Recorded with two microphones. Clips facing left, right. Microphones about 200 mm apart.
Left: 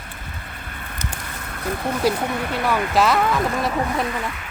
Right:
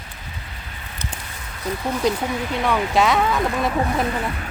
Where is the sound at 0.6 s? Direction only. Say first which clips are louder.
Left 2 dB; 55° left (ahead or behind).